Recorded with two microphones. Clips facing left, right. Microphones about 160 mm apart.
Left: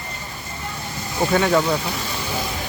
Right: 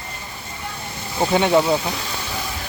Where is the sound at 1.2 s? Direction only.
20° right (ahead or behind).